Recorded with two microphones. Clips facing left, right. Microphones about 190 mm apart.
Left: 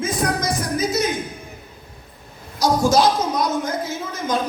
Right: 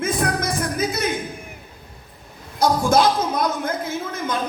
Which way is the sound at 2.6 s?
55° right (ahead or behind).